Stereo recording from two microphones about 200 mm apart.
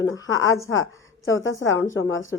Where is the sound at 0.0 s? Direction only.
80° left.